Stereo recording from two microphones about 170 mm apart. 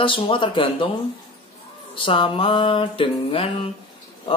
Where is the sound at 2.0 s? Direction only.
30° left (ahead or behind).